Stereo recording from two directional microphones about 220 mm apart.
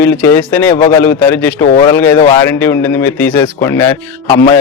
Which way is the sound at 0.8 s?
25° left (ahead or behind).